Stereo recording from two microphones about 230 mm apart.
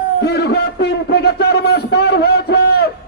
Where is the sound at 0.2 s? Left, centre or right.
Left.